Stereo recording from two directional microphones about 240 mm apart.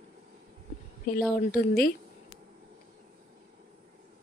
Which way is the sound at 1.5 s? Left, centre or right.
Left.